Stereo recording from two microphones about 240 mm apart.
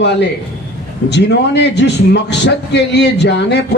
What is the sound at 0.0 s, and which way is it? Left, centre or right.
Speech, left.